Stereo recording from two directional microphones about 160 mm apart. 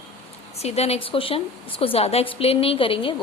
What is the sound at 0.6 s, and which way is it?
A woman's voice, 40° left (ahead or behind).